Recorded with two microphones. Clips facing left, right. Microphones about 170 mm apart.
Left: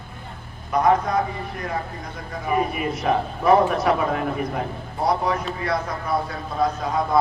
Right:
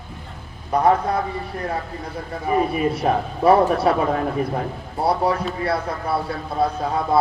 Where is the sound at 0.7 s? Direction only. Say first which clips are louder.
Right 1 dB; 30° right (ahead or behind).